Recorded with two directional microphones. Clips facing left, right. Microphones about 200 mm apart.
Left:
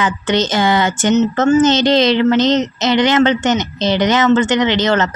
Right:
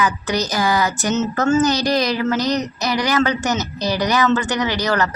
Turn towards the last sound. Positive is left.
turn(degrees=25)  # may be behind; listen again after turning